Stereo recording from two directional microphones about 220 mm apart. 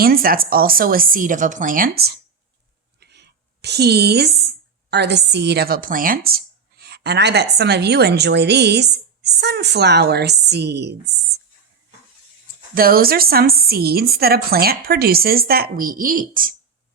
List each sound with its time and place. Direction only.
0.0 s speech: 40° right (ahead or behind)
3.0 s a sound: 50° right (ahead or behind)
4.9 s a woman's voice: 50° right (ahead or behind)
12.7 s a woman's voice: 40° right (ahead or behind)